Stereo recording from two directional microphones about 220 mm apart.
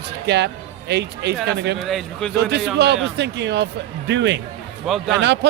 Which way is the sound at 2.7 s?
50° right (ahead or behind).